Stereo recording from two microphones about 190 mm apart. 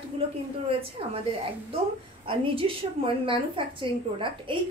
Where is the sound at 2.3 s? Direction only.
30° right (ahead or behind).